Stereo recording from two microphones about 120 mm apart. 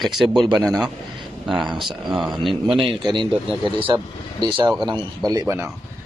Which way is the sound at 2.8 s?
40° right (ahead or behind).